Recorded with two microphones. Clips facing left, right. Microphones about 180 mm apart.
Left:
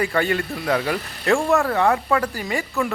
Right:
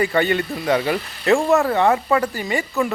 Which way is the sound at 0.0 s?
Centre (ahead or behind).